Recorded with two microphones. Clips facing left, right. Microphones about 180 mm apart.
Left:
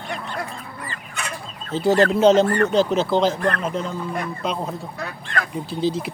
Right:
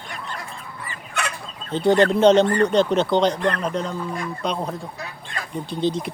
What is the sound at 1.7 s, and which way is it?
Speech, centre (ahead or behind).